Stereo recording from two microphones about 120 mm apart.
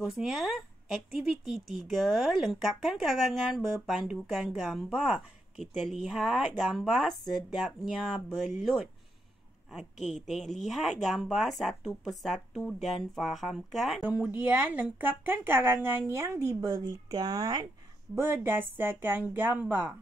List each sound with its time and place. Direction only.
0.0 s speech: 5° right (ahead or behind)
14.0 s speech: 10° right (ahead or behind); by 17.6 s 35° right (ahead or behind)
18.1 s speech: 20° right (ahead or behind)